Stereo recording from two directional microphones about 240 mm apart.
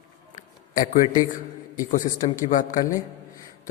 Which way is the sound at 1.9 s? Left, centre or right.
Left.